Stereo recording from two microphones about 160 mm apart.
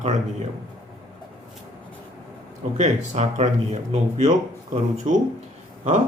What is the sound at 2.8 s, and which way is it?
Speech, 45° right (ahead or behind).